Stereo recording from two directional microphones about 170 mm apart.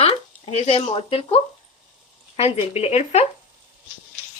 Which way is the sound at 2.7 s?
40° left (ahead or behind).